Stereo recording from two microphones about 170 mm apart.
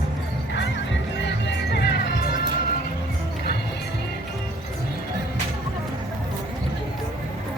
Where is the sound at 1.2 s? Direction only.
85° left.